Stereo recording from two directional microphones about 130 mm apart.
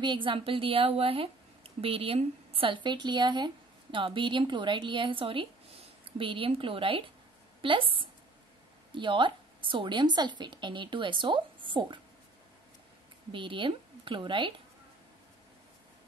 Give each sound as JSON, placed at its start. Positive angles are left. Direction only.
{"t": 0.0, "sound": "a woman's voice", "side_deg": -40}
{"t": 13.3, "sound": "a woman's voice", "side_deg": -40}